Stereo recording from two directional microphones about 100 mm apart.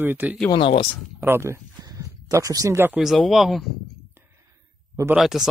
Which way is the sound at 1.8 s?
35° right (ahead or behind).